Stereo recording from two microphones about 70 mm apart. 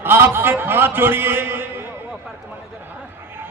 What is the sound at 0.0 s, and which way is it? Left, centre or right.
A man's voice, right.